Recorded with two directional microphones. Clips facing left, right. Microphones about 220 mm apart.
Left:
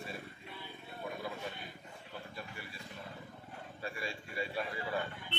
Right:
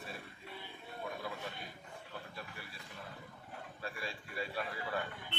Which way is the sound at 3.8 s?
Centre (ahead or behind).